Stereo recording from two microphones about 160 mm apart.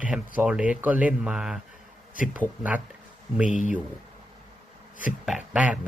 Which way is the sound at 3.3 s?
10° right (ahead or behind).